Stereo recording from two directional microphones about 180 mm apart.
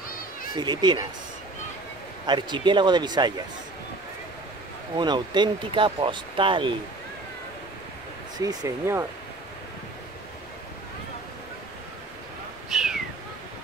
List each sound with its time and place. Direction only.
0.6 s speech: 25° right (ahead or behind)
2.2 s speech: 25° right (ahead or behind)
4.9 s speech: 25° right (ahead or behind)
8.4 s speech: 20° right (ahead or behind)
12.6 s a sound: 5° right (ahead or behind)